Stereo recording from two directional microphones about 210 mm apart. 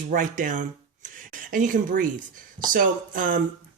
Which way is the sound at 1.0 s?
40° right (ahead or behind).